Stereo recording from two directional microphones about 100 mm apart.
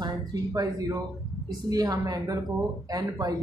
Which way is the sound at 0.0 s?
40° right (ahead or behind).